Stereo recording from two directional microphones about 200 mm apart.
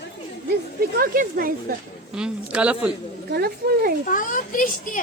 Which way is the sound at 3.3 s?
50° right (ahead or behind).